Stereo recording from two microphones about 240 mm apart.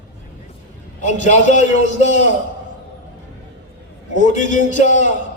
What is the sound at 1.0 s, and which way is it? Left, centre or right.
A man's voice, left.